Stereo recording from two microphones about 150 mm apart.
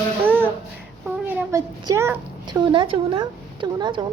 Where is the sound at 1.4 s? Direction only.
20° right (ahead or behind).